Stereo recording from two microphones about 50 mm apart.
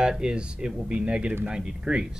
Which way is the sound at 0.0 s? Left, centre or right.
Centre.